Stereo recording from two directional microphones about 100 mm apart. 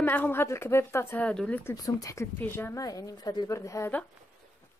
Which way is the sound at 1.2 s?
10° left (ahead or behind).